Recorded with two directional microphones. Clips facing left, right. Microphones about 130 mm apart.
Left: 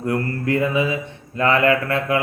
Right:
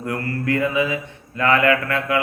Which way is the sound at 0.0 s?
25° left (ahead or behind).